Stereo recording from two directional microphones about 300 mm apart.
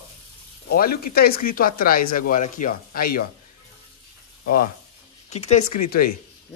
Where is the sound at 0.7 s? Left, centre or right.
Left.